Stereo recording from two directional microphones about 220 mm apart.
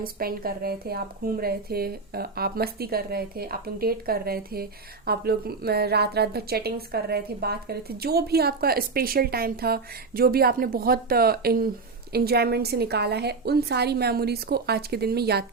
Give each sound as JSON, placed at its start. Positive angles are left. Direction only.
{"t": 0.0, "sound": "a woman's voice", "side_deg": -40}